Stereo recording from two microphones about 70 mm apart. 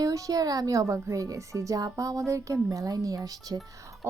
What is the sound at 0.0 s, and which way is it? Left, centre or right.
A woman's voice, right.